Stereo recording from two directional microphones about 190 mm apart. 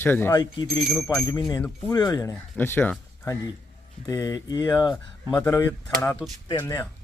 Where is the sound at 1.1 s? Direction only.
20° left (ahead or behind).